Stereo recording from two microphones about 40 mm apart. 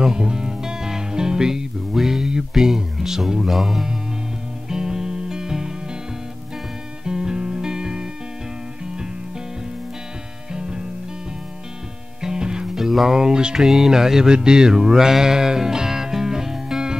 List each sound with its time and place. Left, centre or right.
0.0 s music: centre
7.1 s music: centre
10.5 s music: centre
12.2 s music: centre
12.6 s music: centre
13.6 s music: centre